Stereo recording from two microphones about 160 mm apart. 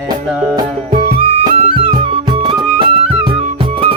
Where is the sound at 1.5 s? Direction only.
35° right (ahead or behind).